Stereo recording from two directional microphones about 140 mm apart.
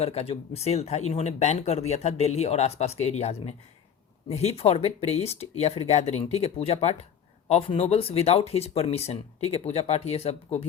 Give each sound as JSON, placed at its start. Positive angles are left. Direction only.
{"t": 0.0, "sound": "speech", "side_deg": 45}